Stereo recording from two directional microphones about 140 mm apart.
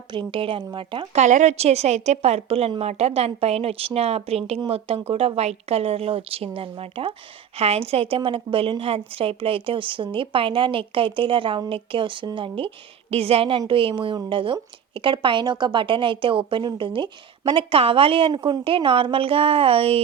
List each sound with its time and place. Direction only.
0.1 s a woman's voice: 35° right (ahead or behind)
1.1 s a woman's voice: 55° right (ahead or behind)